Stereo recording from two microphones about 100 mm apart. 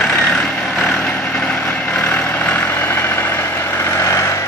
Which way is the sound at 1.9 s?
20° left (ahead or behind).